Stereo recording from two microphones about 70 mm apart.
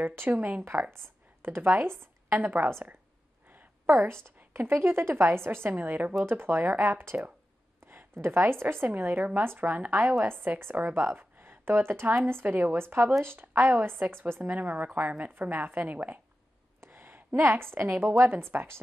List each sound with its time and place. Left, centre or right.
0.1 s a woman's voice: right
4.6 s a woman's voice: right